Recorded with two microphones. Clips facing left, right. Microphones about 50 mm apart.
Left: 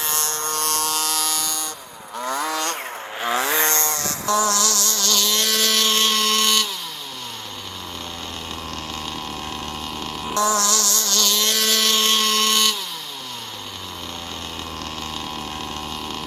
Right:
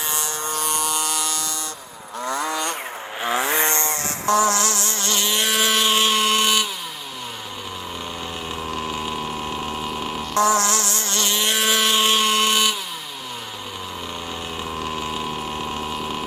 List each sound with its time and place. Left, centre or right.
0.0 s electric shaver: centre
2.1 s vehicle: centre
8.7 s pump: centre
10.3 s vehicle: right; by 12.7 s centre
14.8 s pump: centre